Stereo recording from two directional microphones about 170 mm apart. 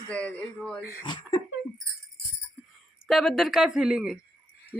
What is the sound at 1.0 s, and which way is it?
Speech, 25° left (ahead or behind).